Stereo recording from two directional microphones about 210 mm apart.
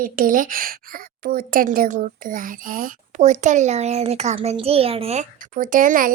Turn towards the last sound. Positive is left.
turn(degrees=-40)  # may be behind; listen again after turning